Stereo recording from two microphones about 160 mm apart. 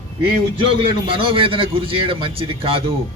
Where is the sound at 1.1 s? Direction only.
35° right (ahead or behind).